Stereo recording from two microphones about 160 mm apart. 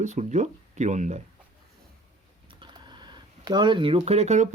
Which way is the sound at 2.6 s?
30° right (ahead or behind).